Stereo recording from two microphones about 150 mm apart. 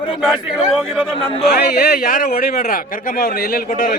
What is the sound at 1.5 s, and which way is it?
Speech, 90° left.